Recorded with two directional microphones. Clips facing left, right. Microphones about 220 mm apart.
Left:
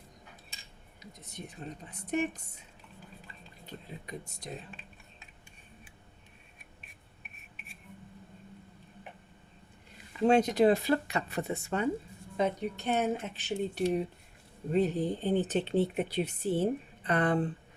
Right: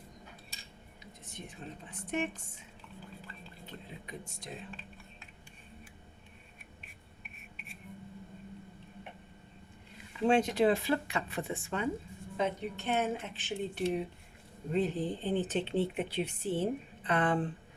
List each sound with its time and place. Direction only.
1.2 s speech: 40° left (ahead or behind)
4.0 s speech: 40° left (ahead or behind)
10.2 s speech: 40° left (ahead or behind)